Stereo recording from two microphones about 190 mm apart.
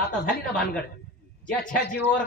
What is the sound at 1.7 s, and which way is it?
Speech, 65° left (ahead or behind).